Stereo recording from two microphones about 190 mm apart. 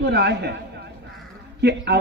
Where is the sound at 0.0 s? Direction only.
60° right (ahead or behind).